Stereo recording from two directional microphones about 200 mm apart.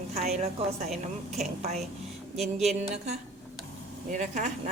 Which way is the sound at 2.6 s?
35° right (ahead or behind).